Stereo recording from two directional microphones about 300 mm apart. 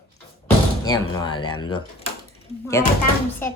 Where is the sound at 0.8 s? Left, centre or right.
Centre.